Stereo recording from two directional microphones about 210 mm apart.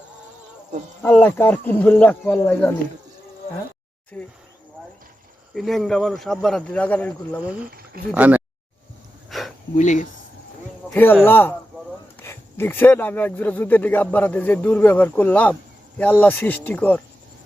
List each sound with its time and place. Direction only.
1.0 s speech: 10° left (ahead or behind)
4.1 s speech: 5° left (ahead or behind)
5.5 s speech: centre (ahead or behind)
7.4 s speech: 5° right (ahead or behind)
7.7 s speech: 45° right (ahead or behind)
8.1 s speech: 5° right (ahead or behind)
9.3 s a sound: centre (ahead or behind)
9.7 s speech: 35° left (ahead or behind)
10.8 s speech: 10° left (ahead or behind)